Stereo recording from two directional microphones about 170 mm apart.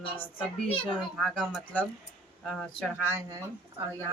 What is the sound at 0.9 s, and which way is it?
Speech, centre (ahead or behind).